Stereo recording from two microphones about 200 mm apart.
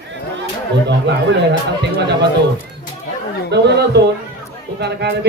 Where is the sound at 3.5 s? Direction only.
55° right (ahead or behind).